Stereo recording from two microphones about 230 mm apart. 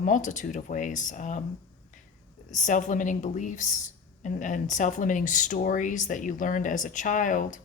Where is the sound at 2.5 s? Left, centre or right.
Left.